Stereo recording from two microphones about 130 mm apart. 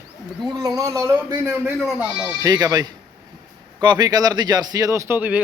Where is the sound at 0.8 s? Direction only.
25° right (ahead or behind).